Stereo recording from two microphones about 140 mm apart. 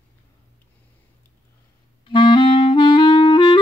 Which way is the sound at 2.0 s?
35° left (ahead or behind).